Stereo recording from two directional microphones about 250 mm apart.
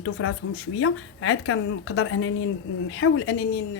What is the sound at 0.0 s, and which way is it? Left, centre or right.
Speech, left.